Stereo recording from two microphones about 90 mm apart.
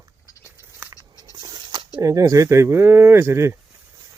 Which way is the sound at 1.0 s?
50° right (ahead or behind).